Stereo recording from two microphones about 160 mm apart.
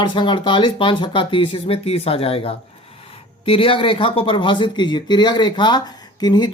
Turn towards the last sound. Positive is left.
turn(degrees=25)  # may be behind; listen again after turning